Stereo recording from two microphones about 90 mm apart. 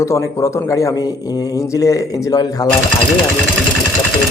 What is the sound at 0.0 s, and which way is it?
Speech, 35° left (ahead or behind).